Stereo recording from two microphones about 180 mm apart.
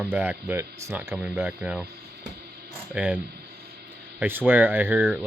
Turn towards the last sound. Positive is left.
turn(degrees=-10)  # may be behind; listen again after turning